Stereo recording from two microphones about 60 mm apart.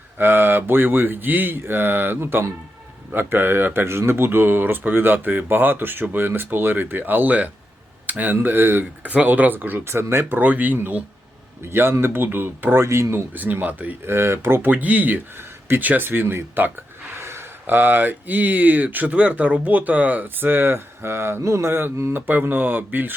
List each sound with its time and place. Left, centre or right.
0.2 s speech: right
9.8 s speech: right
10.3 s speech: right
13.3 s speech: right
14.1 s speech: right
17.2 s speech: right